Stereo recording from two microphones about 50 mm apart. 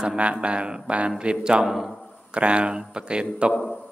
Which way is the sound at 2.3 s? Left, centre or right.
Right.